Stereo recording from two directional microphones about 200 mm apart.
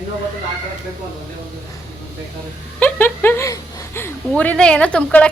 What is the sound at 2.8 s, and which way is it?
Speech, 10° left (ahead or behind).